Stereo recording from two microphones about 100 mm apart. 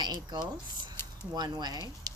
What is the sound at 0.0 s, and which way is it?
Speech, 45° right (ahead or behind).